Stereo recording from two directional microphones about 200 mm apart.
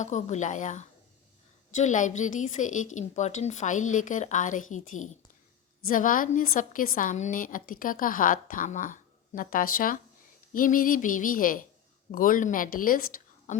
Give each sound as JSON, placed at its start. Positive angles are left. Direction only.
{"t": 0.0, "sound": "a woman's voice", "side_deg": 35}